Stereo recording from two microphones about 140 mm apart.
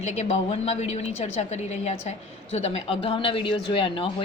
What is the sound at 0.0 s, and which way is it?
A woman's voice, 50° left (ahead or behind).